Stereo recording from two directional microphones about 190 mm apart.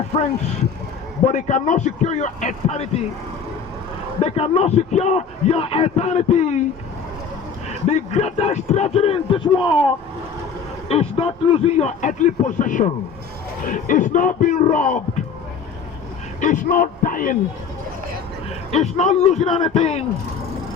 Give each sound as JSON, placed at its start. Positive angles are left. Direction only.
{"t": 1.2, "sound": "a man's voice", "side_deg": 40}
{"t": 4.2, "sound": "a man's voice", "side_deg": 30}
{"t": 7.9, "sound": "a man's voice", "side_deg": 35}
{"t": 13.7, "sound": "music", "side_deg": 45}
{"t": 14.6, "sound": "a man's voice", "side_deg": 40}
{"t": 16.4, "sound": "music", "side_deg": 45}
{"t": 18.7, "sound": "a man's voice", "side_deg": 35}